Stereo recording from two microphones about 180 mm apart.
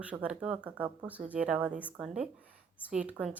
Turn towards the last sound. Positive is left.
turn(degrees=-5)  # may be behind; listen again after turning